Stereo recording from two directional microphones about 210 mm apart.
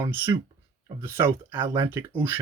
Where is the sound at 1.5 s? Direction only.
25° right (ahead or behind).